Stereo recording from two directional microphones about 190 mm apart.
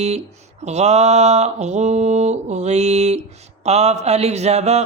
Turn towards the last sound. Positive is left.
turn(degrees=-35)  # may be behind; listen again after turning